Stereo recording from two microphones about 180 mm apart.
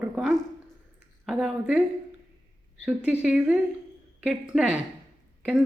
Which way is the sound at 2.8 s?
10° right (ahead or behind).